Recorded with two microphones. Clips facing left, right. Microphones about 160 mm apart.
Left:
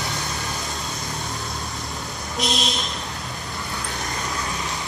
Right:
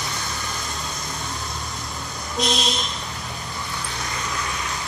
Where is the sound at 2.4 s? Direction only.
Centre (ahead or behind).